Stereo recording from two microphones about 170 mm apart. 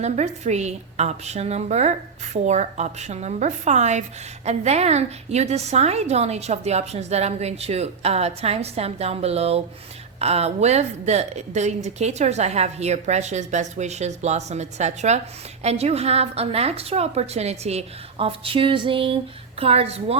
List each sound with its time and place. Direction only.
0.0 s a woman's voice: 40° right (ahead or behind)